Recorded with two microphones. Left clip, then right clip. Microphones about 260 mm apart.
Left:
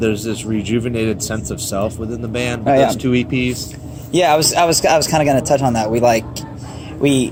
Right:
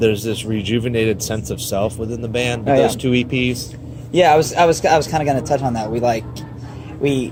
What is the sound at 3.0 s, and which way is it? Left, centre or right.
Speech, right.